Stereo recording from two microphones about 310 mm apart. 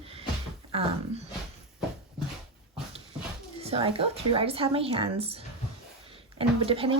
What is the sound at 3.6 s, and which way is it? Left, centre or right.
Speech, centre.